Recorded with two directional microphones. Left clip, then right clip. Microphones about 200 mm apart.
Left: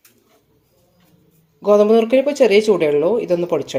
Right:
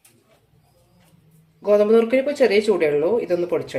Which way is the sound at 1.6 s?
25° left (ahead or behind).